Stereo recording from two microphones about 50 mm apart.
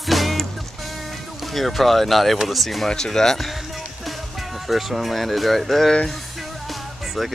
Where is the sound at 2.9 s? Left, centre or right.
Centre.